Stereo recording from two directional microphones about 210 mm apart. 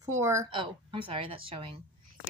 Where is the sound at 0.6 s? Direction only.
25° right (ahead or behind).